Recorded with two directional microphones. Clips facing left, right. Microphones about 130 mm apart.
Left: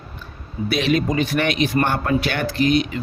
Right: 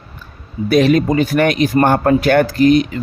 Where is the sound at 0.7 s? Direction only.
45° right (ahead or behind).